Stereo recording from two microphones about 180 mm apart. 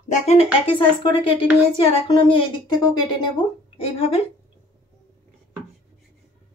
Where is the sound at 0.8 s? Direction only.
25° left (ahead or behind).